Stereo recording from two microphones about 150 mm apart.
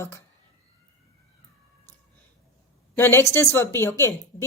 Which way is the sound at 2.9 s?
15° left (ahead or behind).